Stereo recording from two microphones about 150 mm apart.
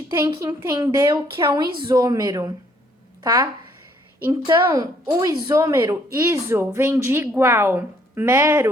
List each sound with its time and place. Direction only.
0.4 s a woman's voice: 20° right (ahead or behind)